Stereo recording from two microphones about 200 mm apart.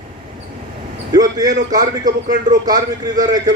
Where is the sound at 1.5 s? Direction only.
40° right (ahead or behind).